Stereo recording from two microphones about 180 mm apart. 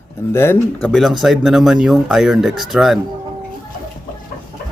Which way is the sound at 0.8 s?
Centre (ahead or behind).